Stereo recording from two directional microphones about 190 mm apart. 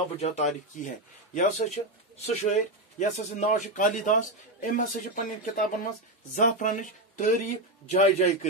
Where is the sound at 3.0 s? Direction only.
40° left (ahead or behind).